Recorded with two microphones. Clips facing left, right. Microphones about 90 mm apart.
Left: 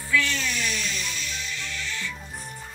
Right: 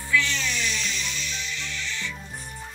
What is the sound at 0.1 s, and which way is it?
Music, 20° right (ahead or behind).